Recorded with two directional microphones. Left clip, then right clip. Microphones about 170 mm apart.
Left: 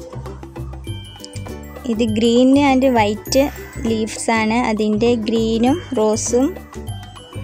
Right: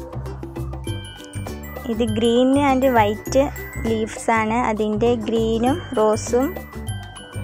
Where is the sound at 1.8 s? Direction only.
5° right (ahead or behind).